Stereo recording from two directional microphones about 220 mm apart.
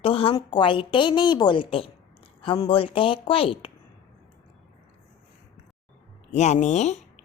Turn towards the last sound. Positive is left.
turn(degrees=30)  # may be behind; listen again after turning